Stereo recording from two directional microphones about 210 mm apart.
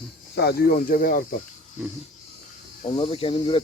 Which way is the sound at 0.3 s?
45° left (ahead or behind).